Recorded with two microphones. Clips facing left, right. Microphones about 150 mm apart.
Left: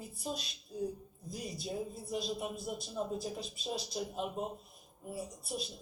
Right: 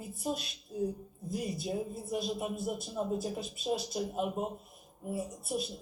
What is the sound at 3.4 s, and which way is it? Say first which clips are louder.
Speech: right 6 dB; 50° right (ahead or behind).